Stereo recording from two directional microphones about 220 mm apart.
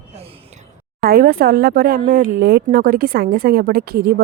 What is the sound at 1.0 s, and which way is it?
A woman's voice, 40° right (ahead or behind).